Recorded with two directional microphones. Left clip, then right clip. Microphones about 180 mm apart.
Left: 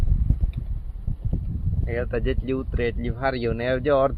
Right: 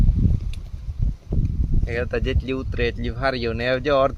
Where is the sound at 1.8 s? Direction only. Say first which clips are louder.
Right 1 dB; 15° right (ahead or behind).